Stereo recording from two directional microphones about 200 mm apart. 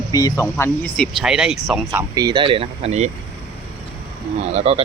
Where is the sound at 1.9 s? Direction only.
15° right (ahead or behind); by 3.1 s 30° right (ahead or behind).